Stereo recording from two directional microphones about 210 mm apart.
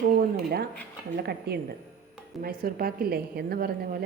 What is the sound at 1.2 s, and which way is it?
A woman's voice, 50° right (ahead or behind).